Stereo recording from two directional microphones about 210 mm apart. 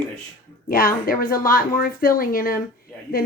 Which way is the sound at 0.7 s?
45° left (ahead or behind).